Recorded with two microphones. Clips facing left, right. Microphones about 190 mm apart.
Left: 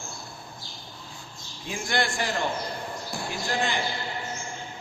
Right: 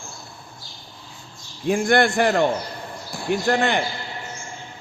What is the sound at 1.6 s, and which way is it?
Speech, 55° right (ahead or behind).